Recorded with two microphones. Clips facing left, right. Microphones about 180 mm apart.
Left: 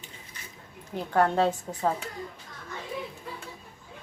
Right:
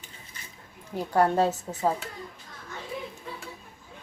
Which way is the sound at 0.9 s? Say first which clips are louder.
Right 1 dB; 10° right (ahead or behind).